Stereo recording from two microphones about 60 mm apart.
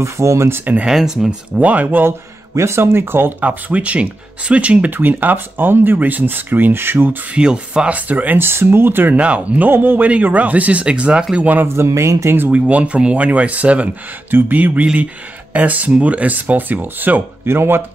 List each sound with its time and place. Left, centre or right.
0.0 s speech: right
0.8 s speech: centre
1.6 s speech: right
2.0 s speech: right
7.3 s speech: centre; by 9.2 s right
9.2 s speech: right
9.7 s speech: right; by 11.4 s centre
11.6 s speech: right
12.4 s speech: right